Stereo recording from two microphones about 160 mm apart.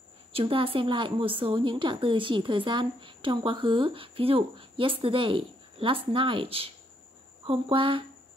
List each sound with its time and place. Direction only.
0.3 s a woman's voice: 35° right (ahead or behind)